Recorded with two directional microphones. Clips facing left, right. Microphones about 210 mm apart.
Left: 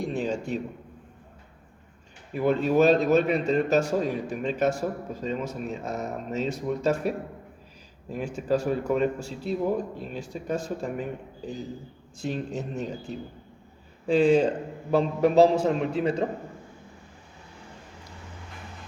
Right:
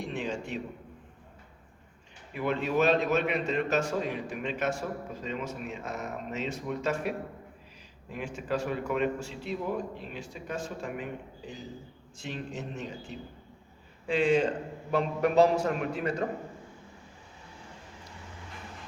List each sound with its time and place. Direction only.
0.0 s a sound: 40° left (ahead or behind)
2.3 s a man's voice: 40° left (ahead or behind)
8.1 s a man's voice: 40° left (ahead or behind)
12.2 s a man's voice: 40° left (ahead or behind)